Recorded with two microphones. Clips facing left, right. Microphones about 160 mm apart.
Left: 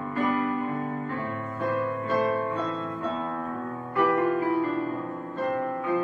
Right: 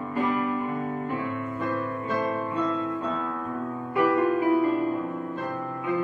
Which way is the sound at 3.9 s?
15° right (ahead or behind).